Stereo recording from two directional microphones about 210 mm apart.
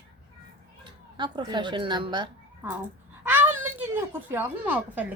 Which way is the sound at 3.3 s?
10° right (ahead or behind).